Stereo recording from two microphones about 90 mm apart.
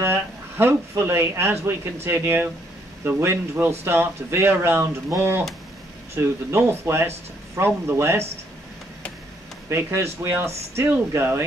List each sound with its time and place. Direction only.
0.0 s a man's voice: 25° right (ahead or behind)
9.7 s a man's voice: 30° right (ahead or behind)